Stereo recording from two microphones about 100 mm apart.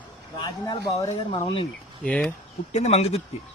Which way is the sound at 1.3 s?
60° left (ahead or behind).